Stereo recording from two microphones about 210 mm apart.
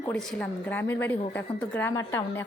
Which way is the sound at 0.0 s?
10° left (ahead or behind).